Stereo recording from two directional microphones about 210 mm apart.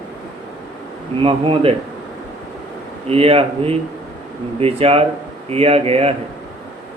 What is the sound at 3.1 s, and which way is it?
Speech, 25° right (ahead or behind).